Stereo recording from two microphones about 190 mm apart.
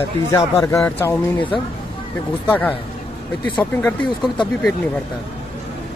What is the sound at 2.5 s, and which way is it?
Speech, 5° left (ahead or behind).